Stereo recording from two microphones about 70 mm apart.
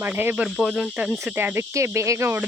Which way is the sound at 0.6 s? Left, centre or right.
Centre.